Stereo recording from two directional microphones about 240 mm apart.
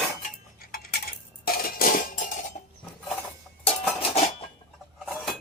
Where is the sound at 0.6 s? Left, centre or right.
Left.